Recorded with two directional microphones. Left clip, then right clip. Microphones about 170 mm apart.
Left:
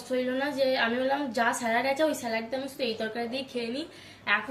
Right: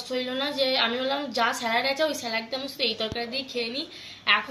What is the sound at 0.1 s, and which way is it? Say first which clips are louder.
A woman's voice: even; 10° left (ahead or behind).